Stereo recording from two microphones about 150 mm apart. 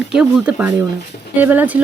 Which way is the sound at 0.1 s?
5° right (ahead or behind).